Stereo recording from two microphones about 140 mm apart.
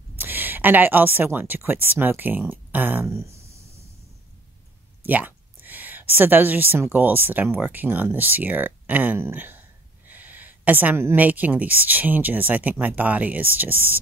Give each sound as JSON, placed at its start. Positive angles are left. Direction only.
{"t": 0.2, "sound": "speech", "side_deg": -15}
{"t": 5.0, "sound": "a woman's voice", "side_deg": -10}